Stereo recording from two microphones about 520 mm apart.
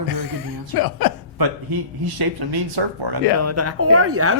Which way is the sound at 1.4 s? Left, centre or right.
Right.